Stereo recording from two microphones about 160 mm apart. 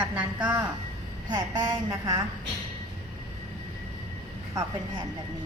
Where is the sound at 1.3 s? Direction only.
25° right (ahead or behind).